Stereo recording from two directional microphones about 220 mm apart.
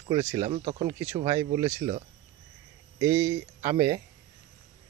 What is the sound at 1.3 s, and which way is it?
Speech, 15° right (ahead or behind).